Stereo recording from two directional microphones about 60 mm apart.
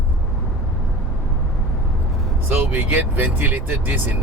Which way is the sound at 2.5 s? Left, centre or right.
Right.